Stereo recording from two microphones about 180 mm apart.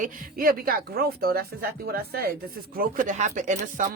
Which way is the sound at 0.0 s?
50° right (ahead or behind).